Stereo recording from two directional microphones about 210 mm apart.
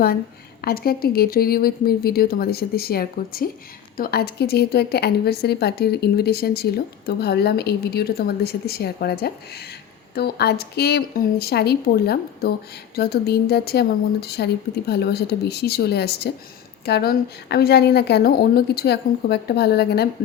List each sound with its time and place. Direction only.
0.6 s a woman's voice: 45° left (ahead or behind)